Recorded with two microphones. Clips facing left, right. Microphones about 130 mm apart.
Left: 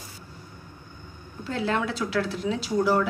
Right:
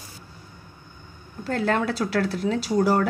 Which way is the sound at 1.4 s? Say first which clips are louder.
Right 3 dB; 45° right (ahead or behind).